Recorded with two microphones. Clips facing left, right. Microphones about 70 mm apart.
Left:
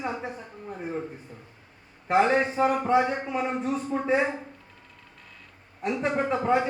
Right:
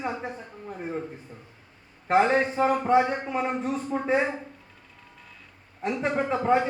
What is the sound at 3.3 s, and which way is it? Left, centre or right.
Speech, right.